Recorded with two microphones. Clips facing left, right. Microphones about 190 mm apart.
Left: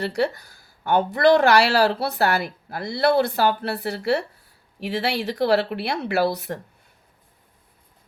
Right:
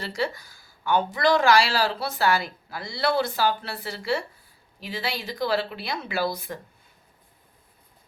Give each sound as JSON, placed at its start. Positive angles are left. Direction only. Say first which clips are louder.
{"t": 0.0, "sound": "speech", "louder": "left 5 dB", "side_deg": 65}